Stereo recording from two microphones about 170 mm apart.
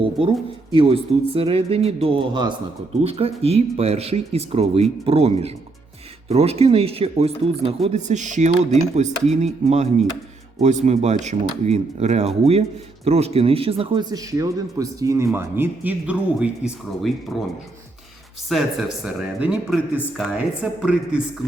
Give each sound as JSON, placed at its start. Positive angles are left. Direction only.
{"t": 0.0, "sound": "a man's voice", "side_deg": -30}